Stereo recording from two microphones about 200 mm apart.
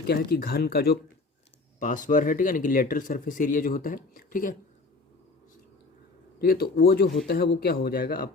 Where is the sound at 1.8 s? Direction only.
40° left (ahead or behind).